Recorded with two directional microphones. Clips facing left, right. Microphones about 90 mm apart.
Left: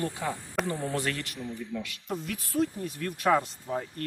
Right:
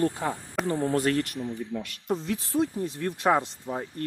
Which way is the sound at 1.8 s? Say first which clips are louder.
Right 5 dB; 30° right (ahead or behind).